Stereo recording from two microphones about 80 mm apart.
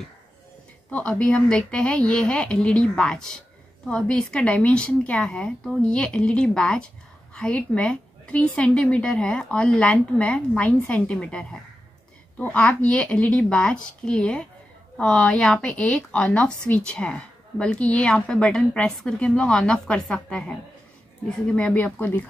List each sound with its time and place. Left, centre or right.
0.8 s a woman's voice: centre